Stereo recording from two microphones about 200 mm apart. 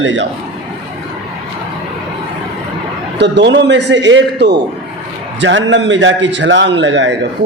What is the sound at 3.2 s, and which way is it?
A man's voice, 60° right (ahead or behind).